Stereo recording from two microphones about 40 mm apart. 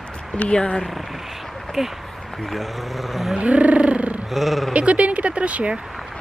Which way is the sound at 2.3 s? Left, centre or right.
Centre.